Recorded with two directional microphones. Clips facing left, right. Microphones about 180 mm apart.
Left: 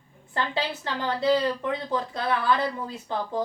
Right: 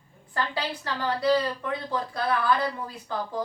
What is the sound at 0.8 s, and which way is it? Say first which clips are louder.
Speech: even; 20° left (ahead or behind).